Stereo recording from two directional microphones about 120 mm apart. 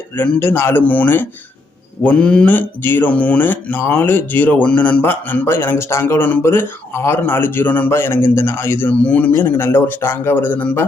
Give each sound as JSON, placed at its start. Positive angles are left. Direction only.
{"t": 0.2, "sound": "speech", "side_deg": 15}